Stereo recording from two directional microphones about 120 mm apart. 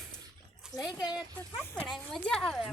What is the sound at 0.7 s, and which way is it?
Speech, 30° left (ahead or behind).